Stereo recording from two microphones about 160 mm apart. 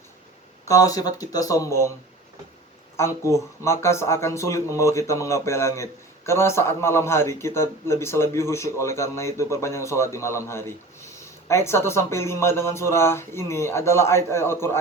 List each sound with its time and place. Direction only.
0.7 s speech: 20° left (ahead or behind)
3.0 s speech: 20° left (ahead or behind)